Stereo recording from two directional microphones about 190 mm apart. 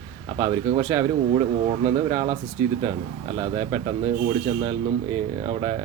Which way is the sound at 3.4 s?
20° right (ahead or behind).